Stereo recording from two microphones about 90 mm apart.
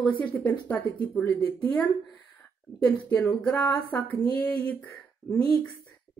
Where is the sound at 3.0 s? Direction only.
15° left (ahead or behind).